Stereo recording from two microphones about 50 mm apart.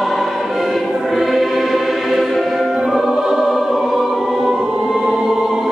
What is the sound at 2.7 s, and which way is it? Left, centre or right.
Music, centre.